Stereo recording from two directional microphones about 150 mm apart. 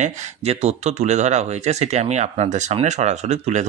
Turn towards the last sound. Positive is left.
turn(degrees=-50)  # may be behind; listen again after turning